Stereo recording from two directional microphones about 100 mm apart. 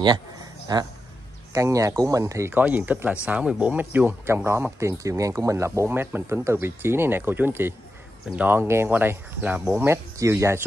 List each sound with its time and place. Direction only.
0.7 s a man's voice: 45° right (ahead or behind)
1.5 s speech: 35° right (ahead or behind)
2.6 s speech: 15° right (ahead or behind)